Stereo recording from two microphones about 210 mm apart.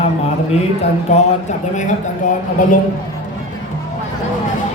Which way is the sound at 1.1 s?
35° left (ahead or behind).